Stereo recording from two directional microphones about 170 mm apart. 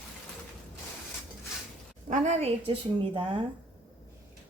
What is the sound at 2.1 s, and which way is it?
A woman's voice, 40° right (ahead or behind).